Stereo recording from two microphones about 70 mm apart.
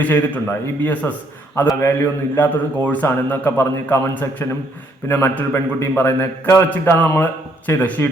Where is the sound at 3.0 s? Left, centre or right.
Left.